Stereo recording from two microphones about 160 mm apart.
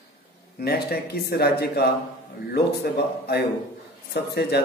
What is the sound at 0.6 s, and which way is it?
Speech, 80° left.